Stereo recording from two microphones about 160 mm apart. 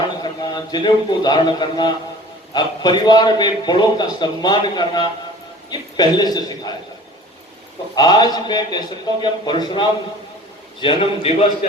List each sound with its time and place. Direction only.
0.2 s a man's voice: 25° left (ahead or behind)
7.9 s a man's voice: 25° left (ahead or behind)